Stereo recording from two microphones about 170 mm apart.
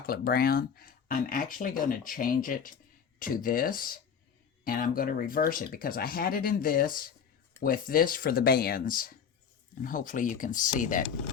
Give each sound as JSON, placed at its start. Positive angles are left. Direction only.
{"t": 0.0, "sound": "speech", "side_deg": 60}